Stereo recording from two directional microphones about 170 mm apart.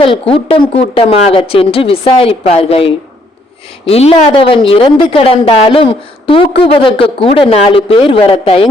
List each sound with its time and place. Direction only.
0.0 s a woman's voice: 35° left (ahead or behind)